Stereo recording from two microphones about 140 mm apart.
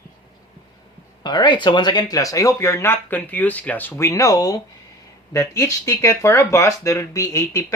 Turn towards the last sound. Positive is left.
turn(degrees=20)  # may be behind; listen again after turning